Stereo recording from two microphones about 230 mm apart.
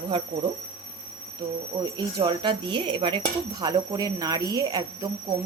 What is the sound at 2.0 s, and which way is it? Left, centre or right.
Speech, centre.